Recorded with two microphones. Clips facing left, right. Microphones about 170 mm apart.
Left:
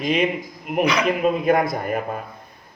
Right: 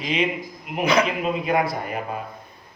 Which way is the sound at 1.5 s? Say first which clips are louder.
Left 4 dB; 50° left (ahead or behind).